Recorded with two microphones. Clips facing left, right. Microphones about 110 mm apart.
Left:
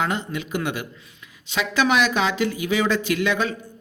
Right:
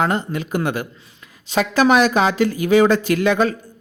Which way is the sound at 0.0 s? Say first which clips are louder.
Right 5 dB; 40° right (ahead or behind).